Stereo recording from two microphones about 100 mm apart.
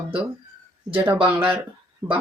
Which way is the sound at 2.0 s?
25° right (ahead or behind).